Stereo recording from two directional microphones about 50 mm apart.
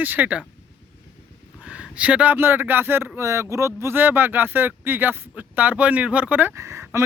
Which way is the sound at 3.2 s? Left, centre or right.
Right.